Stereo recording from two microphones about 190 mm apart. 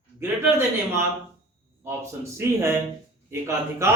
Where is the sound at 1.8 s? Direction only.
15° right (ahead or behind).